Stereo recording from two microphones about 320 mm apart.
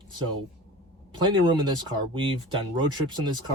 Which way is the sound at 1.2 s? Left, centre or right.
Centre.